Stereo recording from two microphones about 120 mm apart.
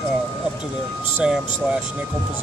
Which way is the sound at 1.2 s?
10° right (ahead or behind).